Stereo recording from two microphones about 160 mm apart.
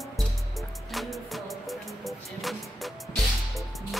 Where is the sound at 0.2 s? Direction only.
Centre (ahead or behind).